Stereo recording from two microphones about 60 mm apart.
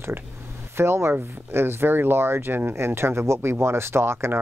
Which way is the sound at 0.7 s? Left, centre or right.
Right.